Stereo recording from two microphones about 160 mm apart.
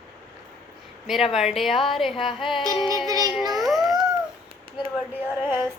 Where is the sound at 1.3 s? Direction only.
Centre (ahead or behind).